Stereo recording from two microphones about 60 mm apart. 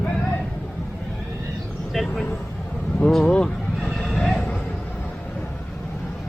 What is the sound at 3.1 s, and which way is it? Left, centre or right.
Speech, centre.